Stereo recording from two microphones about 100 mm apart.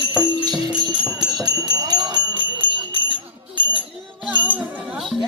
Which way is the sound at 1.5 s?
45° right (ahead or behind).